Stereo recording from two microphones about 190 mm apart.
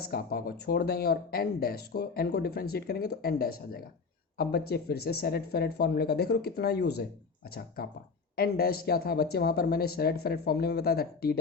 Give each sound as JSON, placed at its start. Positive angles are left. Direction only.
{"t": 0.0, "sound": "speech", "side_deg": 50}
{"t": 8.4, "sound": "speech", "side_deg": 55}